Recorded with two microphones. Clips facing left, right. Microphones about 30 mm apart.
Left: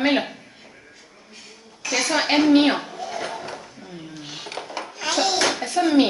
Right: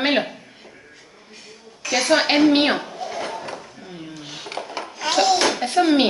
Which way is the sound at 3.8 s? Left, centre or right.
Centre.